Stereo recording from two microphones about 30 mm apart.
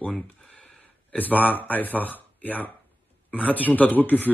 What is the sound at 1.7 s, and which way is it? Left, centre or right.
A man's voice, left.